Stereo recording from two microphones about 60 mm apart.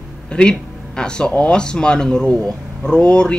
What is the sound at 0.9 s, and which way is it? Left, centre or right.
Speech, centre.